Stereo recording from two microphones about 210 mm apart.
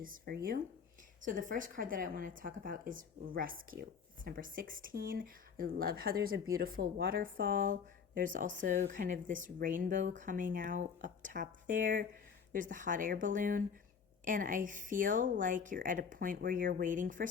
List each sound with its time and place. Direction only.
0.0 s a woman's voice: 40° right (ahead or behind)